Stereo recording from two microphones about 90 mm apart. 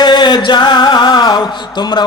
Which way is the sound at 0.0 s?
55° left (ahead or behind).